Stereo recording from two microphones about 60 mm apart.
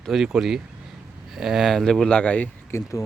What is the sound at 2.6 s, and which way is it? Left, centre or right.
Speech, left.